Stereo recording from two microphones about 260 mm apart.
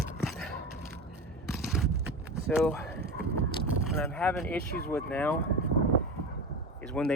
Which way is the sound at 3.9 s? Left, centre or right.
Centre.